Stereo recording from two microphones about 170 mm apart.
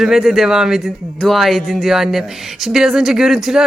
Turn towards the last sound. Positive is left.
turn(degrees=-5)  # may be behind; listen again after turning